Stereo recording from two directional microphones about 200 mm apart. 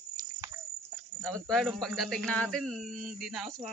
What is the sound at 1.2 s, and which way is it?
Speech, 5° left (ahead or behind).